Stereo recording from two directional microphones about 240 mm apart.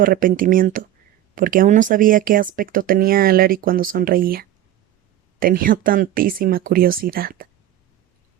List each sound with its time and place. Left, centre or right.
0.0 s speech: right